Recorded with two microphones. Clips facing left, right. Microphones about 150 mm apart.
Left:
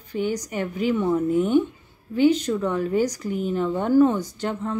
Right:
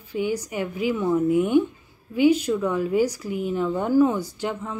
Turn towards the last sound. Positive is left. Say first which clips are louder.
# left 2 dB
turn(degrees=-5)  # may be behind; listen again after turning